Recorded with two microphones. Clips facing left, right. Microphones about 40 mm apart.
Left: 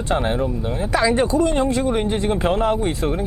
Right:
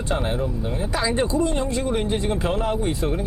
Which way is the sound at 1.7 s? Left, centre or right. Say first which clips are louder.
Left 3 dB; centre.